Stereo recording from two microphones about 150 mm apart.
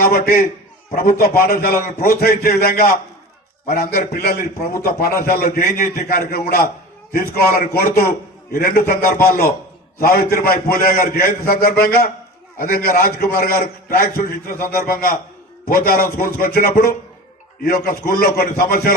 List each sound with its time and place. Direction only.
0.0 s a man's voice: 80° left
5.5 s a man's voice: 70° left (ahead or behind); by 6.7 s 90° left
7.1 s a man's voice: 80° left
12.5 s a man's voice: 80° left
15.6 s a man's voice: 90° left